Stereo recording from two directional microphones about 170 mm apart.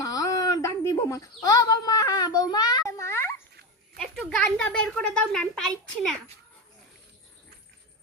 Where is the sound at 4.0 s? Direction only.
5° left (ahead or behind).